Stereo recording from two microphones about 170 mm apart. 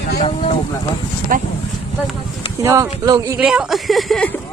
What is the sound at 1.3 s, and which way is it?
Speech, 55° right (ahead or behind).